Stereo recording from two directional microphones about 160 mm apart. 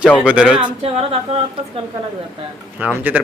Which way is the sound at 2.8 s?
10° right (ahead or behind).